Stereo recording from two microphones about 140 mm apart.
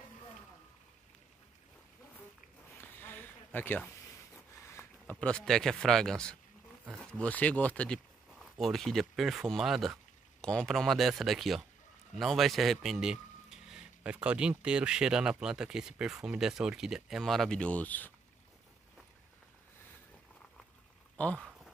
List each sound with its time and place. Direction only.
3.0 s a sound: 15° left (ahead or behind)
5.2 s speech: 5° left (ahead or behind)
21.2 s speech: 10° left (ahead or behind)